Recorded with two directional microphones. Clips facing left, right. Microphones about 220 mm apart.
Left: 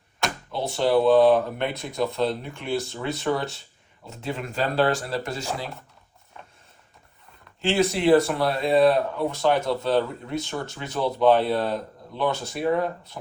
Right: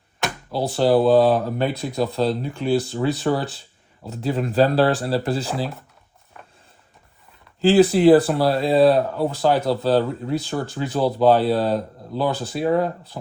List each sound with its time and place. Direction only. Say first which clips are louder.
0.5 s speech: right 4 dB; 35° right (ahead or behind)
7.6 s speech: right 8 dB; 35° right (ahead or behind)